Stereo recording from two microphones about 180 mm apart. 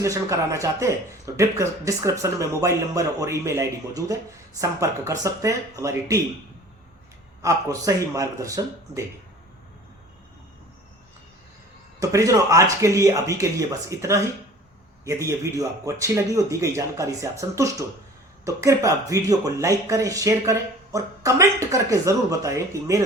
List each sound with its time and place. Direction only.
0.0 s speech: 15° right (ahead or behind)
7.4 s speech: 20° right (ahead or behind)
11.9 s speech: 20° right (ahead or behind)